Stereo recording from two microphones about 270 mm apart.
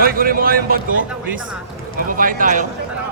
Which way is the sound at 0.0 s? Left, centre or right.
Right.